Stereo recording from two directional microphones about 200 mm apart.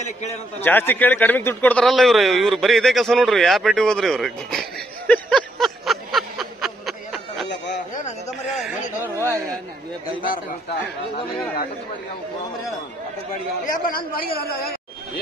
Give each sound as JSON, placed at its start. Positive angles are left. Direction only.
{"t": 0.6, "sound": "a man's voice", "side_deg": 10}
{"t": 7.4, "sound": "a sound", "side_deg": 60}
{"t": 9.0, "sound": "speech", "side_deg": -15}
{"t": 13.3, "sound": "a man's voice", "side_deg": 45}